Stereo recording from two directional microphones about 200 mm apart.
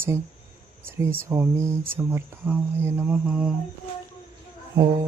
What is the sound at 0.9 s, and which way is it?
Speech, 10° right (ahead or behind).